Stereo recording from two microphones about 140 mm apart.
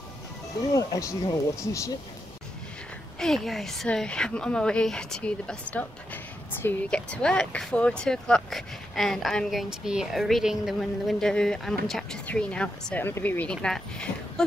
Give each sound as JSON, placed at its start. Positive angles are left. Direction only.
{"t": 0.6, "sound": "speech", "side_deg": 25}
{"t": 3.2, "sound": "speech", "side_deg": 0}